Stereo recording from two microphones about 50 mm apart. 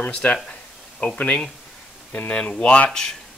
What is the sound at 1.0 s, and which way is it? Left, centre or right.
Speech, left.